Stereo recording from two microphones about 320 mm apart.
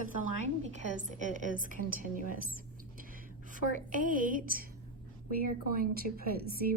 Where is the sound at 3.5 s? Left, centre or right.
Right.